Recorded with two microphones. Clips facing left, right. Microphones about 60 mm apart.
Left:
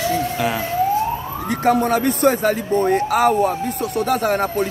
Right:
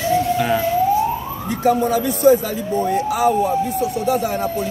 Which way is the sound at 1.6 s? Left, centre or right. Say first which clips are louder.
Even; left.